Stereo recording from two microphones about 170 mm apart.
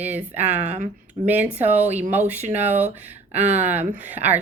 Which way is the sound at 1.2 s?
35° right (ahead or behind).